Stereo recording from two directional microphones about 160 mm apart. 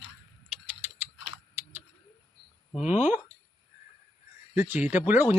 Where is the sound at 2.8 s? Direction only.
45° left (ahead or behind).